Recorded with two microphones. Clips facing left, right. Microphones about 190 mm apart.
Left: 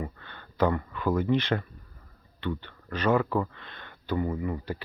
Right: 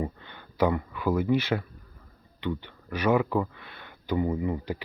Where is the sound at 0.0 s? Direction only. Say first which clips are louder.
Right 4 dB; 15° right (ahead or behind).